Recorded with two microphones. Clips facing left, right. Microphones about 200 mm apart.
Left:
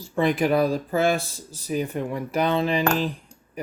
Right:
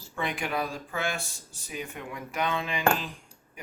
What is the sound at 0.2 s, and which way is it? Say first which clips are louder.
Speech: left 11 dB; 35° left (ahead or behind).